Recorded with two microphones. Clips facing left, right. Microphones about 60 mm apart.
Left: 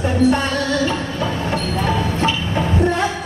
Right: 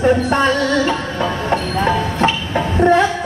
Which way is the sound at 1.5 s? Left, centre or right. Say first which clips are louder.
Right 6 dB; right.